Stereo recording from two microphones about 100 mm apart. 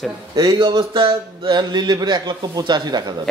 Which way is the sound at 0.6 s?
55° right (ahead or behind).